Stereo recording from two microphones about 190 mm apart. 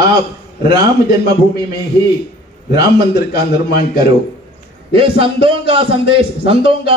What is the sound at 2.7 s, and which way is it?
A man's voice, 60° left (ahead or behind).